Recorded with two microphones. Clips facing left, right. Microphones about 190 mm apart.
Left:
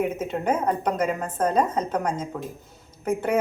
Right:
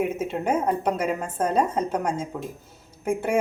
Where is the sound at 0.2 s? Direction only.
10° right (ahead or behind).